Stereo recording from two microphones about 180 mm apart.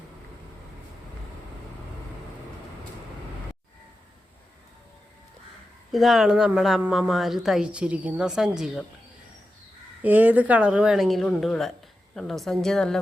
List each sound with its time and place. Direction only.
5.9 s a woman's voice: centre (ahead or behind)
10.0 s a woman's voice: 10° right (ahead or behind)